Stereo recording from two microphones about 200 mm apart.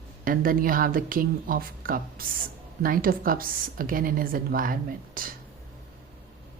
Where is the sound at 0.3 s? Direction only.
45° right (ahead or behind).